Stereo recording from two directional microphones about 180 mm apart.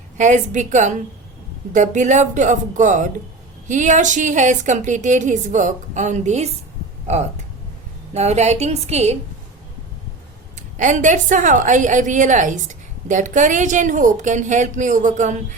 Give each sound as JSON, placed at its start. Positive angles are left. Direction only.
{"t": 0.2, "sound": "a woman's voice", "side_deg": -45}
{"t": 8.1, "sound": "a woman's voice", "side_deg": -40}
{"t": 10.8, "sound": "a woman's voice", "side_deg": -45}